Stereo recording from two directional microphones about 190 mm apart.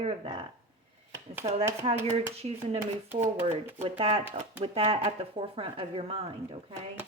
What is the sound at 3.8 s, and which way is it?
Speech, 30° right (ahead or behind).